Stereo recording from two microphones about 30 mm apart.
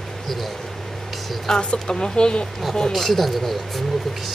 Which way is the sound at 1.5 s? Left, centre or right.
Left.